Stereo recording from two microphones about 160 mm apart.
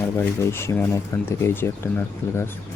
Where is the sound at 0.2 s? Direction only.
15° left (ahead or behind).